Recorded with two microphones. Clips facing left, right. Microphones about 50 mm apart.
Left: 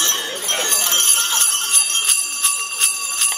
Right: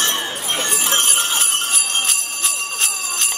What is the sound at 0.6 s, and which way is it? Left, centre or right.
Jingle bell, centre.